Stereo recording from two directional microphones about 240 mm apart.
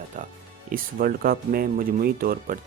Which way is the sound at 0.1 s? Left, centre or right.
Right.